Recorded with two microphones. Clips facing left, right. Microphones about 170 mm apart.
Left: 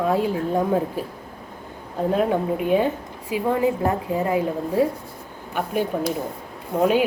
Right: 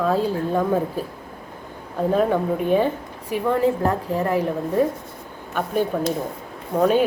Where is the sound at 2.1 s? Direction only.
10° left (ahead or behind).